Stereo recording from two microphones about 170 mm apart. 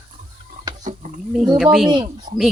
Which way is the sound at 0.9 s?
50° right (ahead or behind).